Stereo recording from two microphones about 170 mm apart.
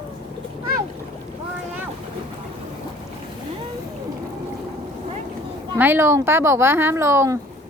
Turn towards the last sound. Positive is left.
turn(degrees=-15)  # may be behind; listen again after turning